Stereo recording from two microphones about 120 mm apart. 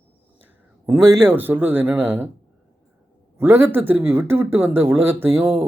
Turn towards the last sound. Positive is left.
turn(degrees=-20)  # may be behind; listen again after turning